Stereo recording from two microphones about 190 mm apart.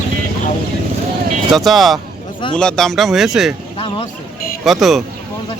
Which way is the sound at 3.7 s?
25° left (ahead or behind).